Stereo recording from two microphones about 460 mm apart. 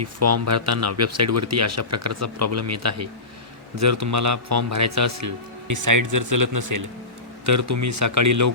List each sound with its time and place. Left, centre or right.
0.0 s speech: right